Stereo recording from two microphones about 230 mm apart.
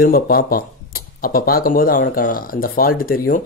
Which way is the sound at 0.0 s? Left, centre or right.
Left.